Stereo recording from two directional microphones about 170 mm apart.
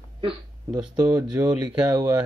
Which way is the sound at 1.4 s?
15° right (ahead or behind).